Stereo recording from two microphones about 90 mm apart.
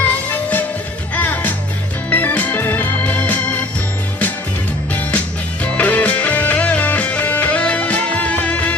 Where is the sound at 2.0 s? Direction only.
15° left (ahead or behind).